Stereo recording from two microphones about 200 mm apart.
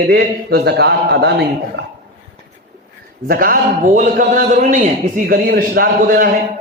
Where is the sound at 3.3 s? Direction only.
45° right (ahead or behind).